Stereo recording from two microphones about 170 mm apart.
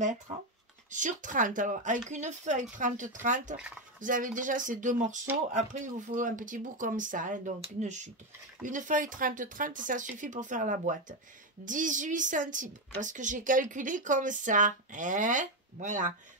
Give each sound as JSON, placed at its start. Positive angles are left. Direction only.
{"t": 0.0, "sound": "speech", "side_deg": -45}